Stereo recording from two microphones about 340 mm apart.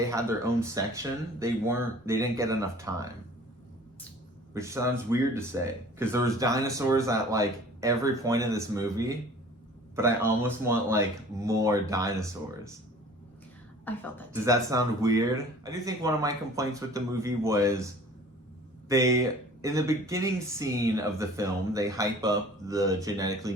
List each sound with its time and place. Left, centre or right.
0.0 s speech: centre
4.5 s speech: centre
13.8 s a woman's voice: centre
14.4 s speech: centre
18.9 s speech: centre